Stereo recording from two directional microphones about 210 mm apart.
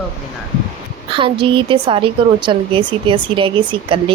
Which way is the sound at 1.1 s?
25° right (ahead or behind).